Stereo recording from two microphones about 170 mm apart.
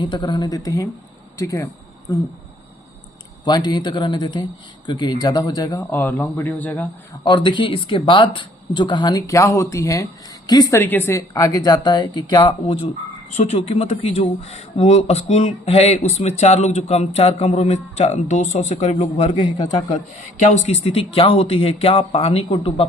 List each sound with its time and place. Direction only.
0.0 s speech: 25° left (ahead or behind)
3.4 s speech: 25° left (ahead or behind)
5.9 s speech: 10° left (ahead or behind)
7.3 s speech: 25° left (ahead or behind)